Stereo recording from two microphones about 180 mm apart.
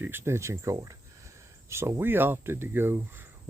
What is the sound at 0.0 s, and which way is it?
Speech, 15° right (ahead or behind).